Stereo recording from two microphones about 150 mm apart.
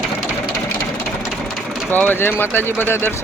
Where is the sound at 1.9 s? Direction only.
15° left (ahead or behind).